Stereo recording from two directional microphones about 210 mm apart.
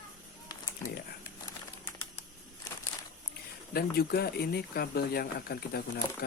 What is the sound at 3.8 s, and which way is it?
Speech, 45° left (ahead or behind).